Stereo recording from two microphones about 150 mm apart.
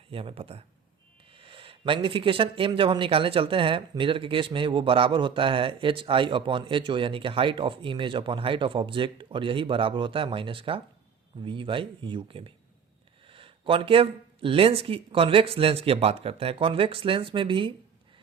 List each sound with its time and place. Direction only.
0.1 s speech: 40° right (ahead or behind)